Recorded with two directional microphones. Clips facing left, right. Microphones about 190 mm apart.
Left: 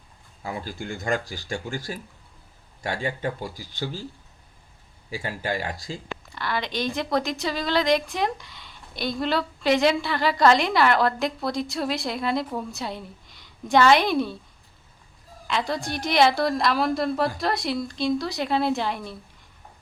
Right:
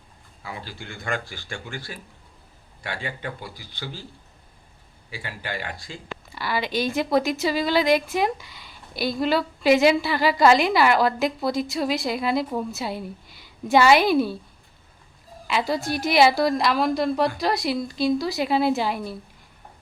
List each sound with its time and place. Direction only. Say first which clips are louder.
0.4 s speech: left 5 dB; 45° left (ahead or behind)
5.1 s speech: left 5 dB; 40° left (ahead or behind)
6.3 s speech: right 3 dB; 5° right (ahead or behind)
15.4 s speech: right 3 dB; 5° right (ahead or behind)